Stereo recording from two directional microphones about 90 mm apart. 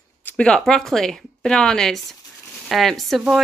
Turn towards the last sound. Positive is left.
turn(degrees=0)  # may be behind; listen again after turning